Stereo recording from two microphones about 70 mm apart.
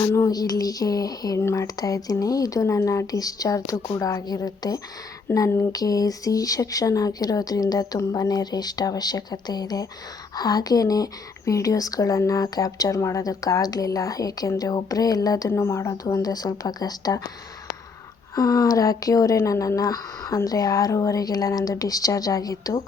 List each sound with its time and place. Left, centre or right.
0.3 s speech: left
1.4 s speech: left
1.6 s a woman's voice: left
5.3 s speech: left
5.7 s speech: left
15.4 s speech: left
16.2 s speech: left
18.3 s speech: left